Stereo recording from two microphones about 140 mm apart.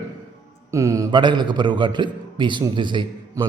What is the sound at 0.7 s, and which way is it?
A man's voice, 20° right (ahead or behind).